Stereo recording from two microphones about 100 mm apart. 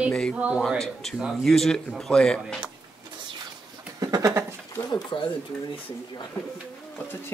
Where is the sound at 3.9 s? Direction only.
40° right (ahead or behind).